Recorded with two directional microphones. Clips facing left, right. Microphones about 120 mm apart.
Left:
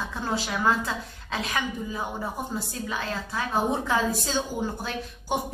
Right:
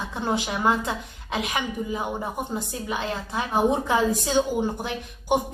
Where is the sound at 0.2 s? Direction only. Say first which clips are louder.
Right 3 dB; 20° right (ahead or behind).